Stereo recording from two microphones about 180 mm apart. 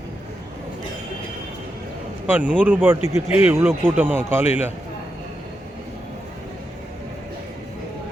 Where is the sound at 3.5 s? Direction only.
10° right (ahead or behind).